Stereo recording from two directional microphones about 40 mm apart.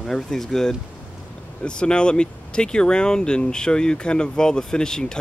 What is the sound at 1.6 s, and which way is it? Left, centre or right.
Speech, left.